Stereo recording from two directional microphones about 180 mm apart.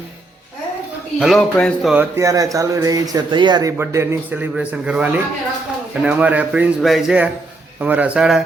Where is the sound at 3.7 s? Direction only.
15° right (ahead or behind).